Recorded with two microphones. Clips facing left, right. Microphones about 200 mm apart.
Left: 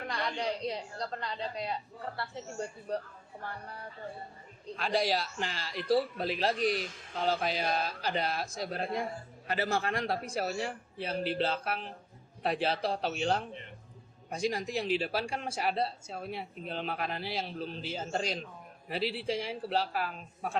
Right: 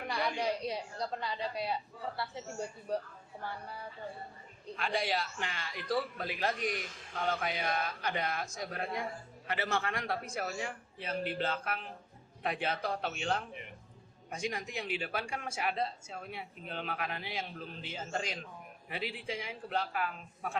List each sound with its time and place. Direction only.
0.1 s a woman's voice: 10° right (ahead or behind)
4.8 s speech: 35° left (ahead or behind)